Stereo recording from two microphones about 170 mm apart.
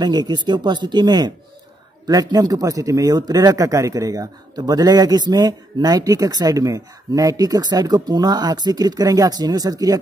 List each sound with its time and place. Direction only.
0.0 s a man's voice: 25° right (ahead or behind)